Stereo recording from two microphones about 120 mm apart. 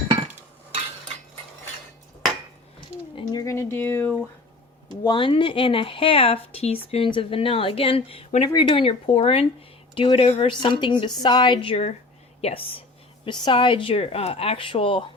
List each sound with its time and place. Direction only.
3.3 s a sound: 25° left (ahead or behind)
5.0 s a woman's voice: 45° left (ahead or behind)
10.5 s a woman's voice: 40° left (ahead or behind)
12.4 s speech: 60° left (ahead or behind)
13.2 s a woman's voice: 45° left (ahead or behind)